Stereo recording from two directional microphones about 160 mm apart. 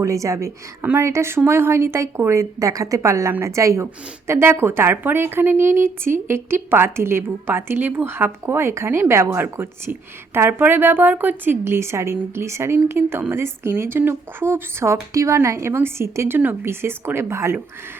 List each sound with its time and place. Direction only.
0.0 s a woman's voice: 20° right (ahead or behind)